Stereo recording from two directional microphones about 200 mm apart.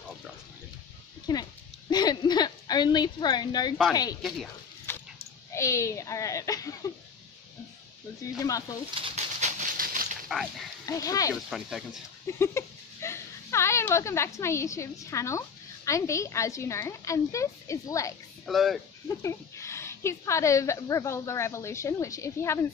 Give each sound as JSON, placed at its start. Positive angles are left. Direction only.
{"t": 1.2, "sound": "a sound", "side_deg": 20}
{"t": 3.9, "sound": "speech", "side_deg": 20}
{"t": 4.9, "sound": "dog", "side_deg": 10}
{"t": 5.5, "sound": "a woman's voice", "side_deg": 15}
{"t": 8.4, "sound": "a woman's voice", "side_deg": 15}
{"t": 8.9, "sound": "a sound", "side_deg": -30}
{"t": 10.3, "sound": "speech", "side_deg": 0}
{"t": 10.9, "sound": "a woman's voice", "side_deg": 15}
{"t": 11.5, "sound": "speech", "side_deg": 0}
{"t": 12.3, "sound": "speech", "side_deg": 15}
{"t": 18.4, "sound": "speech", "side_deg": 0}
{"t": 19.0, "sound": "a woman's voice", "side_deg": 15}